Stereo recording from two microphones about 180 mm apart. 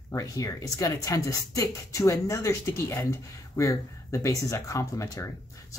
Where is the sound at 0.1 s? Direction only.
20° left (ahead or behind).